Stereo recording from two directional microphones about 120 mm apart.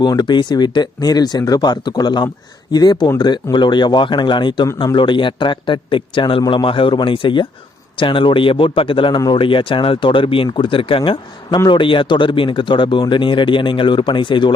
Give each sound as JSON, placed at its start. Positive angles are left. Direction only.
{"t": 0.0, "sound": "a man's voice", "side_deg": 35}